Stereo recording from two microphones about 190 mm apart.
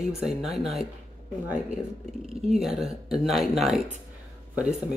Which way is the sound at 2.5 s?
Centre (ahead or behind).